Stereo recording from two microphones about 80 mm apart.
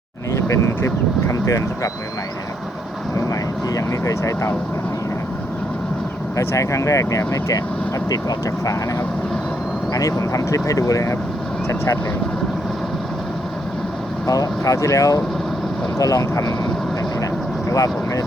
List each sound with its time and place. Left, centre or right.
0.4 s speech: left
3.2 s vehicle: left
6.3 s speech: left
14.3 s speech: left
17.7 s speech: left